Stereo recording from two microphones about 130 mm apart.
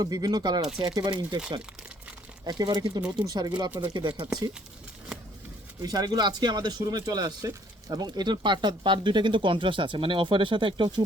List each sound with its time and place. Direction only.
0.0 s speech: 30° right (ahead or behind)
2.4 s speech: 30° right (ahead or behind)
5.8 s speech: 30° right (ahead or behind)